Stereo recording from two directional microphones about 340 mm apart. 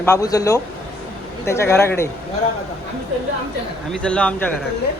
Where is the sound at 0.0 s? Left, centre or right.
Centre.